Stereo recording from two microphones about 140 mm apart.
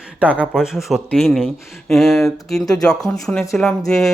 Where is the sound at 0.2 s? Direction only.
10° right (ahead or behind).